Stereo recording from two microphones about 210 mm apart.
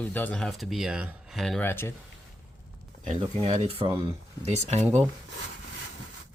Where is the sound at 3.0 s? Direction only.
30° right (ahead or behind).